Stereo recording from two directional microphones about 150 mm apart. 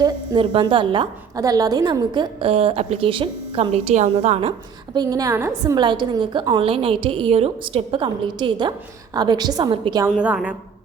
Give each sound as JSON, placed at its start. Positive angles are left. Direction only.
{"t": 0.0, "sound": "a woman's voice", "side_deg": -35}
{"t": 4.9, "sound": "a woman's voice", "side_deg": -25}
{"t": 10.2, "sound": "a woman's voice", "side_deg": -5}